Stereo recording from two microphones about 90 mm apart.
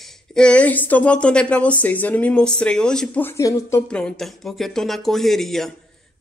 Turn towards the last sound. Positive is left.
turn(degrees=5)  # may be behind; listen again after turning